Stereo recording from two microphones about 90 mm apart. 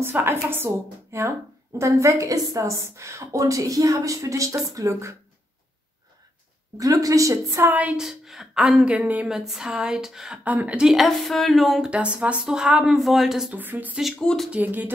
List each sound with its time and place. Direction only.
0.0 s a woman's voice: 25° right (ahead or behind)
6.8 s a woman's voice: 40° right (ahead or behind)
7.6 s speech: 20° right (ahead or behind)
8.0 s speech: 5° right (ahead or behind)
9.3 s speech: 5° right (ahead or behind)
10.4 s speech: 15° right (ahead or behind); by 11.9 s centre (ahead or behind)
11.9 s speech: 15° right (ahead or behind)
13.6 s speech: 20° right (ahead or behind)
14.1 s speech: 5° left (ahead or behind)
14.5 s speech: 20° right (ahead or behind)